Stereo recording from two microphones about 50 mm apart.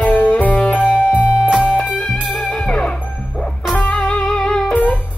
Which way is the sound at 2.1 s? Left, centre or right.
Centre.